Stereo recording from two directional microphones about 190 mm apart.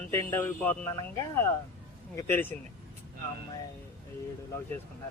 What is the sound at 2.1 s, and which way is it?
Speech, 10° left (ahead or behind).